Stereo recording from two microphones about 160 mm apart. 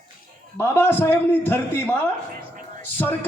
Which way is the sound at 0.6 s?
15° left (ahead or behind).